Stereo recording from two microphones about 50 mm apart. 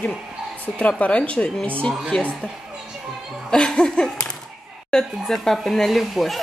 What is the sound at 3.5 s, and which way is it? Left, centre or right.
A child's voice, centre.